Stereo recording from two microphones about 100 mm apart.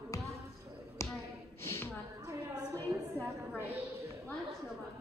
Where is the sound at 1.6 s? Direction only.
25° left (ahead or behind).